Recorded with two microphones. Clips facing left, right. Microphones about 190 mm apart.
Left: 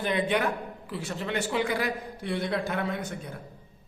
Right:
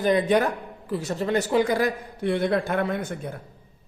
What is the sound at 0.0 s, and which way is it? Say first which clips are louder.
Speech: right 6 dB; 40° right (ahead or behind).